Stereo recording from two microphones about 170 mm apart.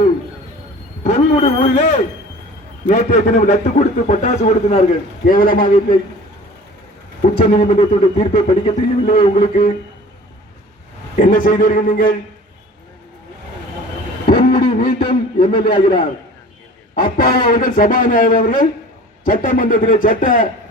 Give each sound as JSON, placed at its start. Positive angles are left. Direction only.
{"t": 1.0, "sound": "a man's voice", "side_deg": 40}
{"t": 5.2, "sound": "speech", "side_deg": 55}
{"t": 7.3, "sound": "a man's voice", "side_deg": 35}
{"t": 11.2, "sound": "a man's voice", "side_deg": 50}
{"t": 14.3, "sound": "a sound", "side_deg": 30}
{"t": 14.9, "sound": "a man's voice", "side_deg": 30}
{"t": 16.9, "sound": "a man's voice", "side_deg": 60}